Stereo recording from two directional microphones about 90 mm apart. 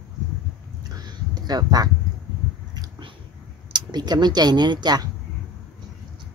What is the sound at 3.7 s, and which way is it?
Speech, 55° right (ahead or behind).